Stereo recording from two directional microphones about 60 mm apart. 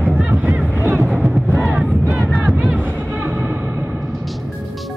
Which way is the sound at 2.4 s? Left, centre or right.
Right.